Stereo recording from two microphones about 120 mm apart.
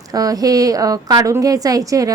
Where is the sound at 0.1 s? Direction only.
30° right (ahead or behind).